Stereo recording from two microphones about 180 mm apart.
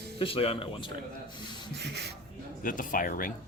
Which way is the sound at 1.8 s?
65° right (ahead or behind).